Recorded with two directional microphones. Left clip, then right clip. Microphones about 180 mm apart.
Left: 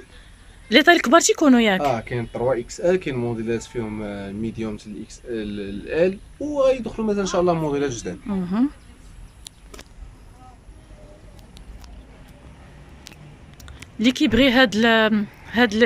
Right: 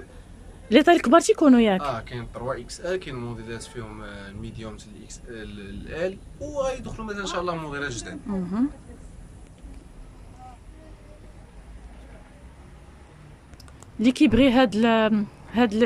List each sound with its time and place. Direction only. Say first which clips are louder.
0.7 s speech: left 3 dB; 10° right (ahead or behind)
1.8 s speech: left 7 dB; 35° left (ahead or behind)
8.3 s speech: left 3 dB; centre (ahead or behind)
13.9 s speech: left 1 dB; 10° right (ahead or behind)